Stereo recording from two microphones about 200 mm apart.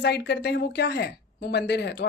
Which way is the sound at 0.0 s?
55° left (ahead or behind).